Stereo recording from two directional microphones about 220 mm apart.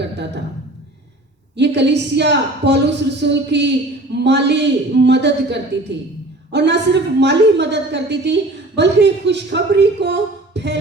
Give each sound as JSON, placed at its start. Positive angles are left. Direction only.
{"t": 1.5, "sound": "a woman's voice", "side_deg": -50}